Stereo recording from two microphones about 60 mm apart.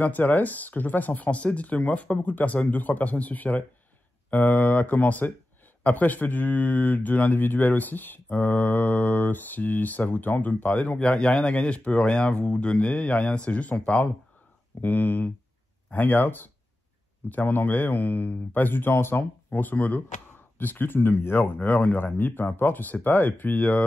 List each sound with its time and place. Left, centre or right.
0.0 s speech: left
21.5 s speech: left